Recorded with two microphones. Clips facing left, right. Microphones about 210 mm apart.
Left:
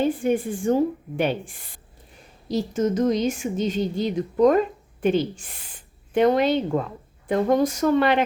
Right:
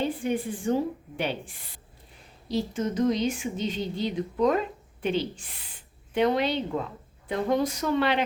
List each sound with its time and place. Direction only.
0.0 s speech: 45° left (ahead or behind)